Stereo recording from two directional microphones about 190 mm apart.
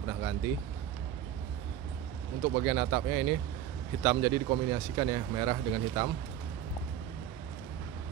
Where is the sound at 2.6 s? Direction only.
20° right (ahead or behind).